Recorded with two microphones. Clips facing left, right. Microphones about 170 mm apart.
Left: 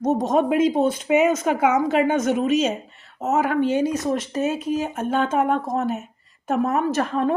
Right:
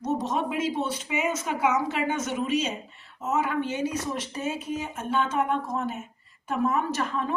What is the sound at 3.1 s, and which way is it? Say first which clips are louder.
Speech: left 6 dB; 65° left (ahead or behind).